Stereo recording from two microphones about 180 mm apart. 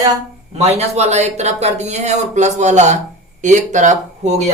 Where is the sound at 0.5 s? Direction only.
35° right (ahead or behind).